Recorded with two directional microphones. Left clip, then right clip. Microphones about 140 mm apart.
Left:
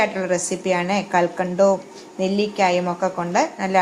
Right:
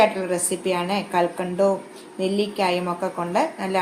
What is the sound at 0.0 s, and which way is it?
Speech, 20° left (ahead or behind).